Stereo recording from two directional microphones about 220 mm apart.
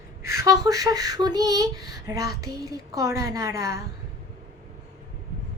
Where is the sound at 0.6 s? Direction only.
15° right (ahead or behind).